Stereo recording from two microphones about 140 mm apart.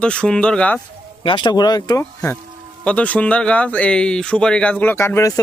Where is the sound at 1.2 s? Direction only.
35° left (ahead or behind).